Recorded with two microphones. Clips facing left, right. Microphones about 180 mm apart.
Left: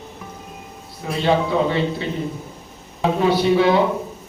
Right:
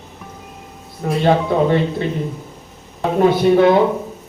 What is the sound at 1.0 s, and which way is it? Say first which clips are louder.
Speech: right 7 dB; 50° right (ahead or behind).